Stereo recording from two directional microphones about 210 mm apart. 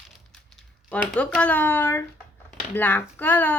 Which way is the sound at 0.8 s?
5° left (ahead or behind).